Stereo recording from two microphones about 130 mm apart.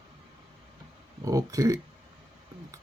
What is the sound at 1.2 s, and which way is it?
Speech, 25° right (ahead or behind).